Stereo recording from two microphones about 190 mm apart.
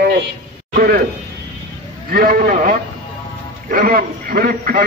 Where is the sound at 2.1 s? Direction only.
50° right (ahead or behind).